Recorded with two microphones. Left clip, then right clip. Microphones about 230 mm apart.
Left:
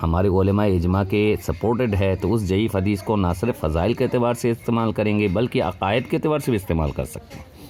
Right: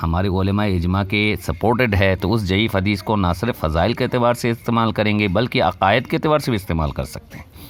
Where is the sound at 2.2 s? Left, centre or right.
Right.